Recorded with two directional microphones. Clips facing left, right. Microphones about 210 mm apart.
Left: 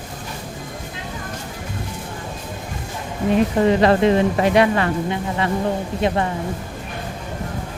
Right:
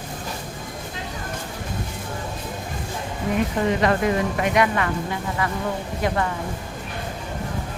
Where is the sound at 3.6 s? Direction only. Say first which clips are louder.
Left 5 dB; 30° left (ahead or behind).